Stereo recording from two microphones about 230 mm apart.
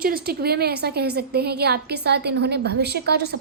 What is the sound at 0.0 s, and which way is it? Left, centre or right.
A woman's voice, right.